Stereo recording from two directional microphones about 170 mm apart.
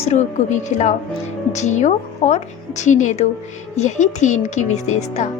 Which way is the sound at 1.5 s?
40° left (ahead or behind).